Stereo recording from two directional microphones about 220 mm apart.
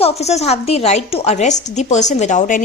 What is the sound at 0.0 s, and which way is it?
A woman's voice, 30° left (ahead or behind).